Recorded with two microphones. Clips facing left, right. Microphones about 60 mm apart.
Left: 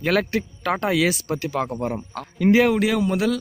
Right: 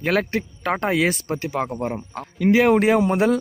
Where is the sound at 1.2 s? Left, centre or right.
Right.